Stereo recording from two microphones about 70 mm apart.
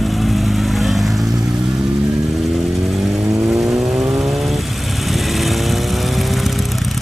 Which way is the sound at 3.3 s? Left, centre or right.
Right.